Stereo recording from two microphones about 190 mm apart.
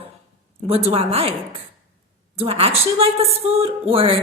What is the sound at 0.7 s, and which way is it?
Speech, 30° right (ahead or behind).